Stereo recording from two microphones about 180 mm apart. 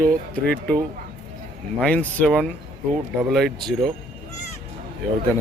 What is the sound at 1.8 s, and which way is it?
Speech, 5° left (ahead or behind).